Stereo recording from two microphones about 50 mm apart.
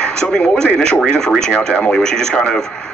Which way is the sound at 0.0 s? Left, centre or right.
Centre.